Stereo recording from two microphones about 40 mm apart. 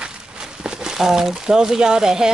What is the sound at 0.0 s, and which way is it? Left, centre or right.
Speech, right.